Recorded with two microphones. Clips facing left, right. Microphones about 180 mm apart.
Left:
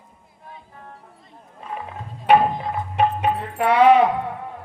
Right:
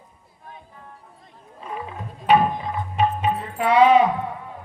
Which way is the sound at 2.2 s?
55° left (ahead or behind).